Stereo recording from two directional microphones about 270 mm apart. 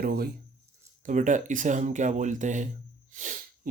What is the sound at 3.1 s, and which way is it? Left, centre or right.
Sneeze, right.